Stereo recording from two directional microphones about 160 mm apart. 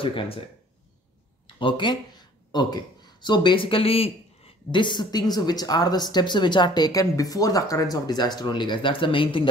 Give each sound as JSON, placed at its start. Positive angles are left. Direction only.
{"t": 0.0, "sound": "speech", "side_deg": 35}
{"t": 1.6, "sound": "speech", "side_deg": 30}